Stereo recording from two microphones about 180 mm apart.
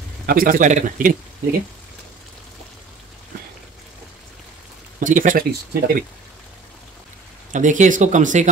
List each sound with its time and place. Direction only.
0.3 s speech: 50° right (ahead or behind)
5.0 s speech: 45° right (ahead or behind)
7.5 s speech: 45° right (ahead or behind)